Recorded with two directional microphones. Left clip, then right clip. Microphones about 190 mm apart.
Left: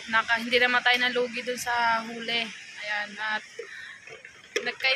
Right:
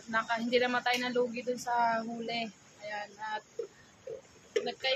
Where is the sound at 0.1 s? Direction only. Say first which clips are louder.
Left 6 dB; 5° right (ahead or behind).